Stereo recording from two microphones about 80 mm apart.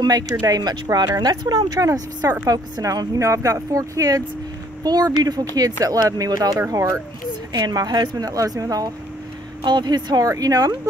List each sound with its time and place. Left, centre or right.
0.0 s speech: right
6.7 s speech: right
7.5 s speech: right
9.6 s speech: right
10.2 s speech: right